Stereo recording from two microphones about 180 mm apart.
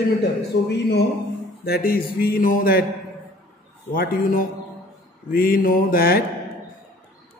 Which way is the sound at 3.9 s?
50° left (ahead or behind).